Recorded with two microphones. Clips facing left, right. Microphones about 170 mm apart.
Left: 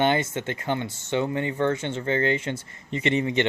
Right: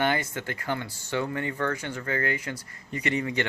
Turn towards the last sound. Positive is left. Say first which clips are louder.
# left 5 dB
turn(degrees=20)  # may be behind; listen again after turning